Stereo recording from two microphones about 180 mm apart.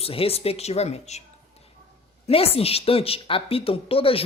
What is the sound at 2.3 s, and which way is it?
A woman's voice, 35° left (ahead or behind).